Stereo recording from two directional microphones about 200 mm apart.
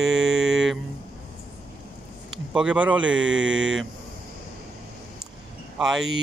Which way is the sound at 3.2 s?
70° right (ahead or behind).